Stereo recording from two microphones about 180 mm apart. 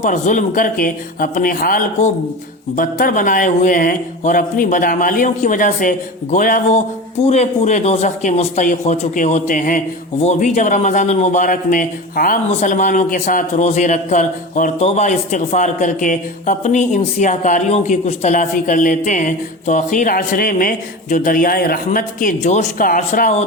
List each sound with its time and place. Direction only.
0.0 s a man's voice: 45° left (ahead or behind)